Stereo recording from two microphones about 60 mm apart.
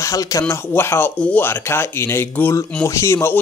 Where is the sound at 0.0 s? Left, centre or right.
Left.